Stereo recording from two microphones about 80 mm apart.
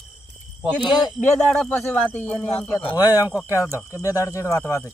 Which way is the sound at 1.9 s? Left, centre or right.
Centre.